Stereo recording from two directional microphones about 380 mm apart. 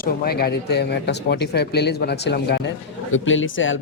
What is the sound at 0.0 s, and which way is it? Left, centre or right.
Speech, left.